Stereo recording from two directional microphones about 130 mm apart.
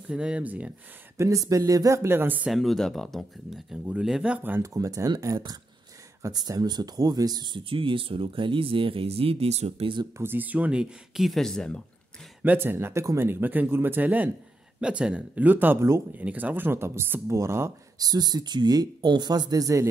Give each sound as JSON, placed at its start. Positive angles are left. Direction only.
{"t": 0.1, "sound": "speech", "side_deg": -10}
{"t": 1.1, "sound": "speech", "side_deg": -25}
{"t": 2.5, "sound": "speech", "side_deg": 0}
{"t": 10.1, "sound": "speech", "side_deg": -15}
{"t": 12.4, "sound": "speech", "side_deg": -15}